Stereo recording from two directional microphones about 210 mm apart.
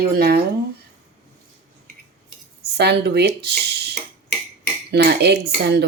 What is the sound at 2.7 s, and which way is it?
Speech, 50° right (ahead or behind).